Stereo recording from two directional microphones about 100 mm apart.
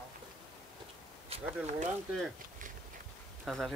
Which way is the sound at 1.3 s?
80° right.